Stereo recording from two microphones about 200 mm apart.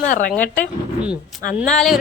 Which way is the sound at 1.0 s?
5° right (ahead or behind).